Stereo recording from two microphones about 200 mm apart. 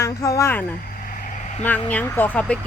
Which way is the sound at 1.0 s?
45° left (ahead or behind).